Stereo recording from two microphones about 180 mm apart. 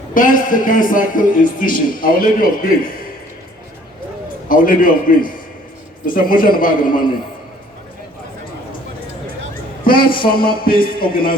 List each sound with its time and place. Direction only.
0.1 s a man's voice: 50° left (ahead or behind)
4.4 s a man's voice: 50° left (ahead or behind)
9.8 s a man's voice: 55° left (ahead or behind)